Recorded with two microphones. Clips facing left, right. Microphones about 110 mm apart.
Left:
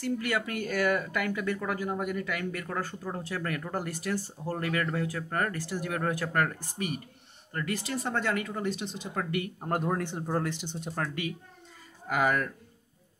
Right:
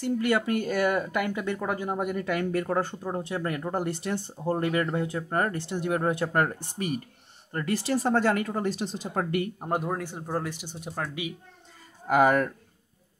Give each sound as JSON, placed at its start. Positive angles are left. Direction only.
{"t": 0.0, "sound": "speech", "side_deg": -25}
{"t": 9.6, "sound": "speech", "side_deg": -10}
{"t": 12.1, "sound": "speech", "side_deg": -35}